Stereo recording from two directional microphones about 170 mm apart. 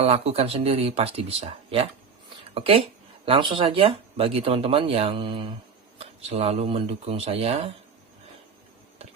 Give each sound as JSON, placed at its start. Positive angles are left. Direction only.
{"t": 0.0, "sound": "speech", "side_deg": -35}